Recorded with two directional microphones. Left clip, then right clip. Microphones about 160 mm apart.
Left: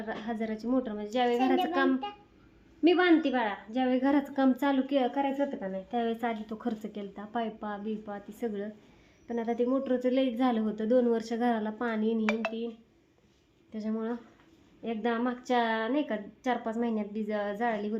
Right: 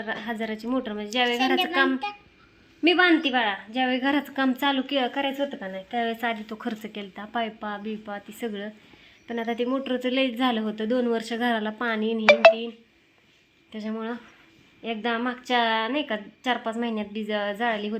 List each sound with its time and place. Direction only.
0.0 s a woman's voice: 15° right (ahead or behind)
12.2 s speech: 60° right (ahead or behind)
13.7 s a woman's voice: 10° right (ahead or behind)